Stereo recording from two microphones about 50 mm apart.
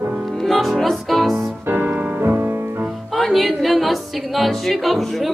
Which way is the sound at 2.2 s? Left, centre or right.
Right.